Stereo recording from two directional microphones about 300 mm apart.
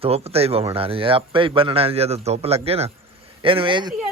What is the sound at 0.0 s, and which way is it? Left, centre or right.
A man's voice, centre.